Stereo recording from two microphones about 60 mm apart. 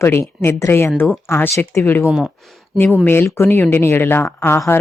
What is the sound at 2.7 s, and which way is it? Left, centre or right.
Speech, left.